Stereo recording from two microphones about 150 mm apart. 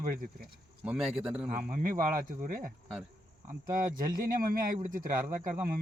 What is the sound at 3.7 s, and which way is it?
Speech, 70° right (ahead or behind).